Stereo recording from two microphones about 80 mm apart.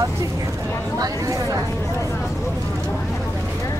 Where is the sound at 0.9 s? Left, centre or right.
Right.